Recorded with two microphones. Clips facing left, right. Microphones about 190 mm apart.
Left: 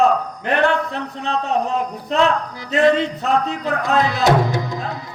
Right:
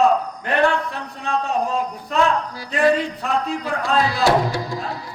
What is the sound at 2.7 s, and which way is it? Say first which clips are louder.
Music: left 3 dB; 25° left (ahead or behind).